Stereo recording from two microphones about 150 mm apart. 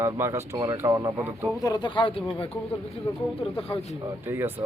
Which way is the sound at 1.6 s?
30° left (ahead or behind).